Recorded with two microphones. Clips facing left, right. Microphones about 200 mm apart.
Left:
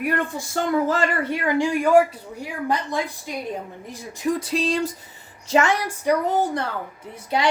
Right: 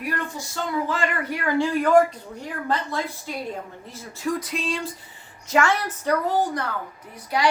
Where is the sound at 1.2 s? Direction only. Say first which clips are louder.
Left 2 dB; 25° left (ahead or behind).